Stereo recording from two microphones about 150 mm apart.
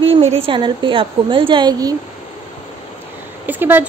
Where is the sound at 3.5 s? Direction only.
15° right (ahead or behind).